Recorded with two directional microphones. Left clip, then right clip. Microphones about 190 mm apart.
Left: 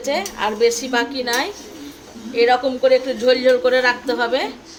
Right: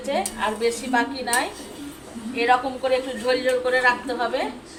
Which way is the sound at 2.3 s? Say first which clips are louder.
Left 5 dB; 45° left (ahead or behind).